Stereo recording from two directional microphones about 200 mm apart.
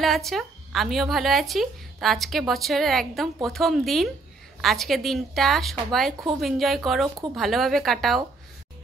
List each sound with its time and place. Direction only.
0.0 s a woman's voice: centre (ahead or behind)